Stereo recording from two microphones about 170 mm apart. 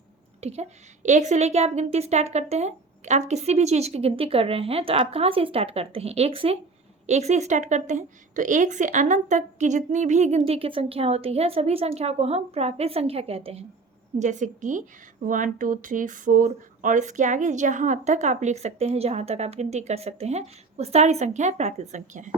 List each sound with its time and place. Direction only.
0.4 s a woman's voice: 40° right (ahead or behind)
14.2 s a woman's voice: 45° right (ahead or behind)